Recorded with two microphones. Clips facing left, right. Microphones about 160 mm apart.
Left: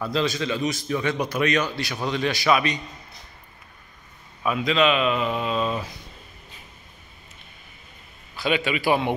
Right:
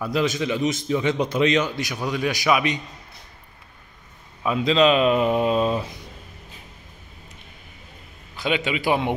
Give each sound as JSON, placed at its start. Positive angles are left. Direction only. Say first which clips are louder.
{"t": 0.0, "sound": "a man's voice", "louder": "right 2 dB", "side_deg": -15}
{"t": 4.4, "sound": "a man's voice", "louder": "right 3 dB", "side_deg": -25}
{"t": 8.4, "sound": "a man's voice", "louder": "even", "side_deg": -20}